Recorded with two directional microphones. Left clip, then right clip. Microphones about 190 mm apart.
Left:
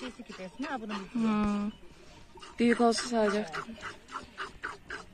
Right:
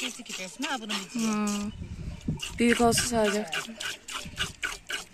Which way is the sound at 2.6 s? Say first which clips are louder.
Right 3 dB; 15° right (ahead or behind).